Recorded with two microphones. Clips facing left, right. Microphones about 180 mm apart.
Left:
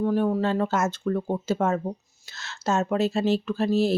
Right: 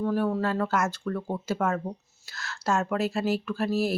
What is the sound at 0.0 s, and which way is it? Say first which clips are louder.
Speech: left 3 dB; 15° left (ahead or behind).